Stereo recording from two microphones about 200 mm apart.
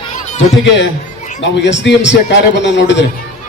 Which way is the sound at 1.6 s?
60° left (ahead or behind).